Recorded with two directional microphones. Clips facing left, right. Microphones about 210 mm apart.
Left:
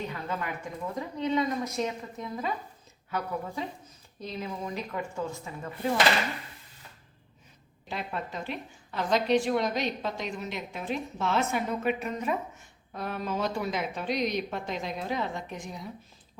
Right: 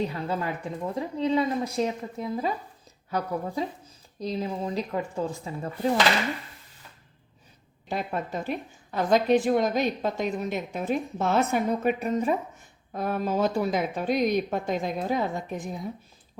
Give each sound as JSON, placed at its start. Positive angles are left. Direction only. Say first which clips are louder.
{"t": 0.0, "sound": "speech", "louder": "right 5 dB", "side_deg": -35}
{"t": 7.9, "sound": "a woman's voice", "louder": "right 5 dB", "side_deg": -45}
{"t": 12.9, "sound": "a woman's voice", "louder": "right 6 dB", "side_deg": -45}